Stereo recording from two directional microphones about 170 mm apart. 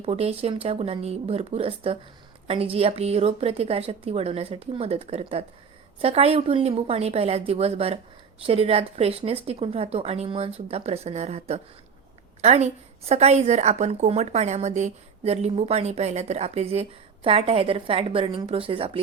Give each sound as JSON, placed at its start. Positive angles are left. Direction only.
{"t": 0.0, "sound": "a woman's voice", "side_deg": -40}